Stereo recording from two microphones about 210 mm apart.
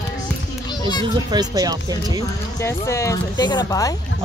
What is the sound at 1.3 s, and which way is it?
Speech, 20° right (ahead or behind).